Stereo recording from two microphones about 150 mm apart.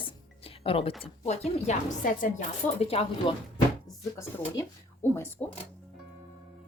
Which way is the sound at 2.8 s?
40° left (ahead or behind).